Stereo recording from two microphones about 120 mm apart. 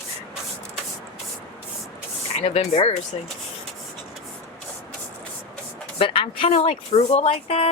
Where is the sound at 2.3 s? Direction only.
60° left (ahead or behind).